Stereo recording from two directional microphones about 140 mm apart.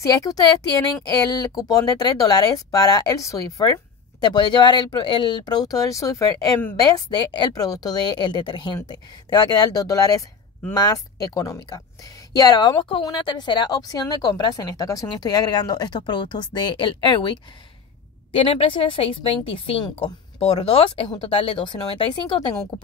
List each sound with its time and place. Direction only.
0.0 s a woman's voice: 25° left (ahead or behind)